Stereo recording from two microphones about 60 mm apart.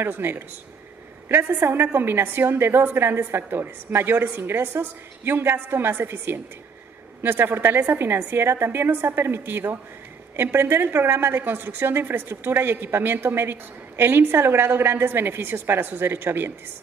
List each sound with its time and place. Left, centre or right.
0.0 s a woman's voice: right